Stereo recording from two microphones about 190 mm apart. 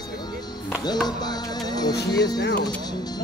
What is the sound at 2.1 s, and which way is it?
Speech, 20° left (ahead or behind).